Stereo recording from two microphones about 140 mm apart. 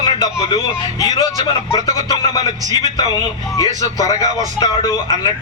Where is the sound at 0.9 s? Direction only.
25° left (ahead or behind).